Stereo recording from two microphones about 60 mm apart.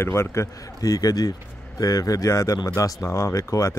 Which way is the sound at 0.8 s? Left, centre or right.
Left.